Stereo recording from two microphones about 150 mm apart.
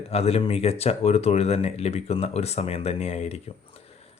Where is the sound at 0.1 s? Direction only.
45° left (ahead or behind).